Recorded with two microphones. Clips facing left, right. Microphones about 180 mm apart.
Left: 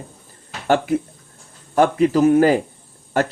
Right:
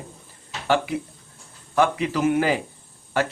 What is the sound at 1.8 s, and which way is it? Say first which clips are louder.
Speech: left 6 dB; 40° left (ahead or behind).